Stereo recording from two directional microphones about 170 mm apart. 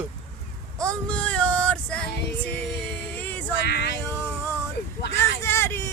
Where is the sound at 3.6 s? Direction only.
70° left (ahead or behind).